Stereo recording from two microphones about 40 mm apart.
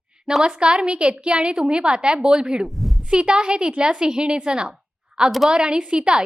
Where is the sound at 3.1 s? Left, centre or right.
Right.